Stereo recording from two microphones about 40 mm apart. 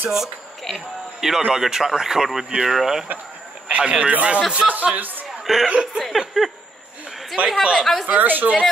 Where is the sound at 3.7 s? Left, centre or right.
Right.